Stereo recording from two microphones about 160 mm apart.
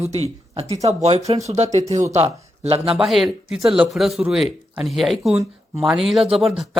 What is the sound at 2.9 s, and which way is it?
Speech, centre (ahead or behind).